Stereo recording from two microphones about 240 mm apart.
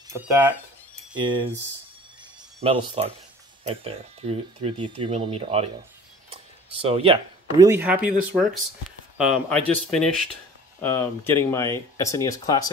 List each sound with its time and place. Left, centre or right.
0.1 s speech: centre
1.1 s speech: centre
2.6 s speech: right
6.8 s speech: right; by 8.1 s centre
9.2 s speech: centre